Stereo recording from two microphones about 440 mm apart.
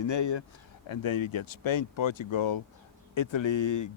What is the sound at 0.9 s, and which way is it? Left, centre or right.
Speech, left.